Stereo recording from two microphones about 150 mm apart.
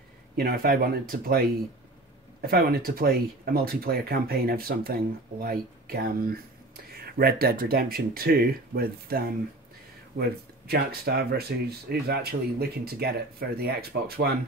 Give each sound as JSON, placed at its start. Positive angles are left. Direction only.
{"t": 0.4, "sound": "speech", "side_deg": -80}
{"t": 7.0, "sound": "speech", "side_deg": -90}
{"t": 10.7, "sound": "speech", "side_deg": -90}